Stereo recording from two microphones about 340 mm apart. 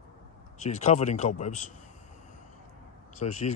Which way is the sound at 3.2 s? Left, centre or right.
Left.